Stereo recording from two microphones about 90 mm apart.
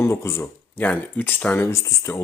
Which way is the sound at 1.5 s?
30° left (ahead or behind).